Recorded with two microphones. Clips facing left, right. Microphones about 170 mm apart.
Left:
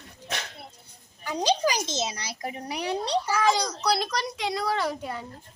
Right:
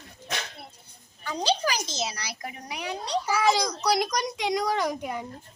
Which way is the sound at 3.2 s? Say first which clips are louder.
Right 4 dB; 10° right (ahead or behind).